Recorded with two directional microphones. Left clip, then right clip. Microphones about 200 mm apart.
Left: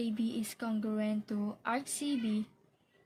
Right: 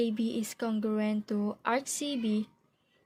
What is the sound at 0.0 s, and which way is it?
Speech, 35° right (ahead or behind).